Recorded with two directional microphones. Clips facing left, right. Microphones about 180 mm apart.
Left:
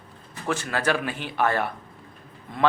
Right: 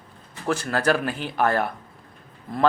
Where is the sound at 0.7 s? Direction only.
40° right (ahead or behind).